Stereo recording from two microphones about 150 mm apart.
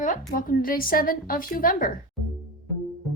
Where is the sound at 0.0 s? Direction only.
60° left (ahead or behind).